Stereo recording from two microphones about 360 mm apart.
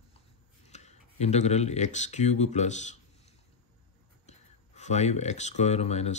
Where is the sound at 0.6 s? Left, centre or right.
Centre.